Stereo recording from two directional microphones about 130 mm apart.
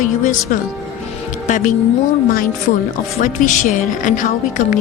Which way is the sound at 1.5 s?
75° left (ahead or behind).